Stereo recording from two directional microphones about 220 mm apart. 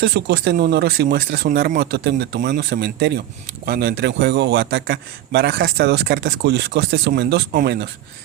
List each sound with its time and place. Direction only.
0.0 s a man's voice: 50° right (ahead or behind)